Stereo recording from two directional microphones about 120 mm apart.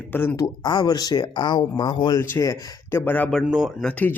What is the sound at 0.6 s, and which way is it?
Speech, 35° left (ahead or behind).